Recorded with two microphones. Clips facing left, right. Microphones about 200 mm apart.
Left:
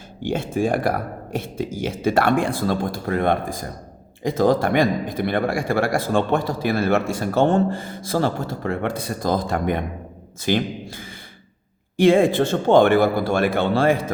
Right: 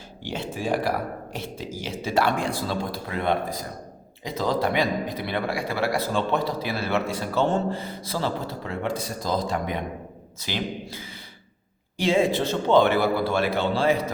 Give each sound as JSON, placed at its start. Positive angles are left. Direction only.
{"t": 0.2, "sound": "a man's voice", "side_deg": 50}